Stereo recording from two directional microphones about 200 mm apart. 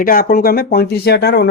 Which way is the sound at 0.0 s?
45° left (ahead or behind).